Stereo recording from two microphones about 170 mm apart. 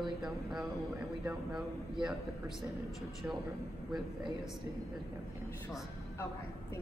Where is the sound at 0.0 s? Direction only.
Centre (ahead or behind).